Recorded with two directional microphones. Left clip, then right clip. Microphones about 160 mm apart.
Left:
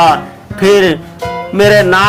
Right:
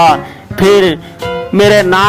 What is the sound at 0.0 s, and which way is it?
Speech, 35° right (ahead or behind).